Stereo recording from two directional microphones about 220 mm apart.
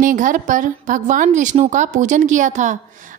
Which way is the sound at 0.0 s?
35° right (ahead or behind).